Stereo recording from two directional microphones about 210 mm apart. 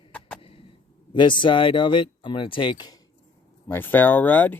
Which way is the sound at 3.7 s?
10° left (ahead or behind).